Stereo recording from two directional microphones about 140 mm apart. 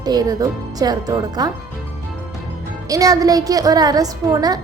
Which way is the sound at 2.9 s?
25° right (ahead or behind).